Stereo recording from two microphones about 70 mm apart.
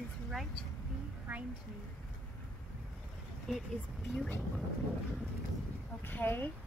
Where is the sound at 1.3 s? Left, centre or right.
Right.